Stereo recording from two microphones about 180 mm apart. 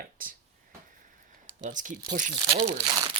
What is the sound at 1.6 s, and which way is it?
Speech, 45° right (ahead or behind).